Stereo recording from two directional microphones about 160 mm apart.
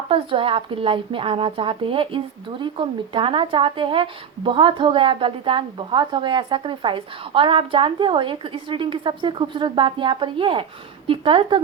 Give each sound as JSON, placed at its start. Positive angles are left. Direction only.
{"t": 0.1, "sound": "speech", "side_deg": -35}